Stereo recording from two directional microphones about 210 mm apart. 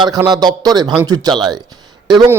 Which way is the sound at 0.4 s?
20° right (ahead or behind).